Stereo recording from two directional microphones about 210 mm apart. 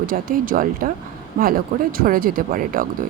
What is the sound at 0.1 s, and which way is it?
Speech, 40° right (ahead or behind).